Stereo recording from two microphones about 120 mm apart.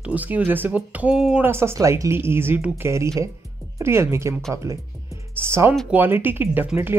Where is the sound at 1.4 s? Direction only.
20° right (ahead or behind).